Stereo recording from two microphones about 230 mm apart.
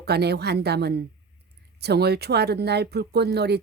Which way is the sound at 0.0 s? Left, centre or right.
Right.